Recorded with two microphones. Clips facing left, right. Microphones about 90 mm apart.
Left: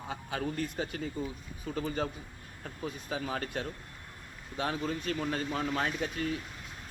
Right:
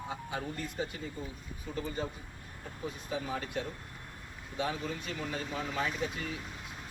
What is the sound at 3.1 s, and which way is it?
Speech, 65° left (ahead or behind).